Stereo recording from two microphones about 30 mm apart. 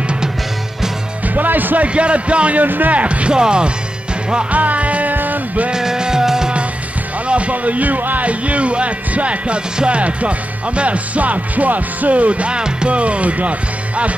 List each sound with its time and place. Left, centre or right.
1.2 s music: right
1.9 s music: right
2.5 s a man's voice: right
2.9 s music: right
3.3 s speech: right
4.5 s music: right
5.1 s music: right
5.7 s music: right
7.2 s music: right
8.3 s music: right
12.5 s speech: right
12.9 s music: right